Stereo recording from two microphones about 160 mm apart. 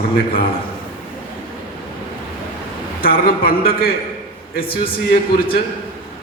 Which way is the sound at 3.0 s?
65° left (ahead or behind).